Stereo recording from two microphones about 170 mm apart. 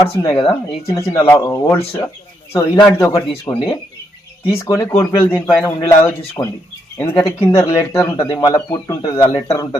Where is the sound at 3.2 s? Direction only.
20° left (ahead or behind).